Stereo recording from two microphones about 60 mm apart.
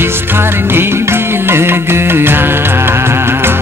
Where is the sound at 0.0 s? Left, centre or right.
Right.